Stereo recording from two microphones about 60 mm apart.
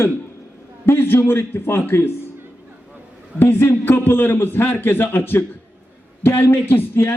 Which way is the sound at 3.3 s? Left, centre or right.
Left.